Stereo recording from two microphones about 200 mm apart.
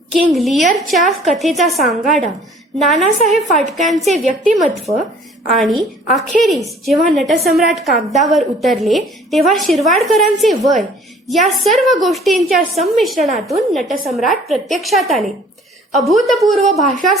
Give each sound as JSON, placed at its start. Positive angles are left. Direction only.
{"t": 0.1, "sound": "a woman's voice", "side_deg": 0}